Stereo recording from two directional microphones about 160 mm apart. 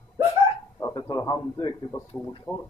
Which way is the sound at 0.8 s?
25° left (ahead or behind).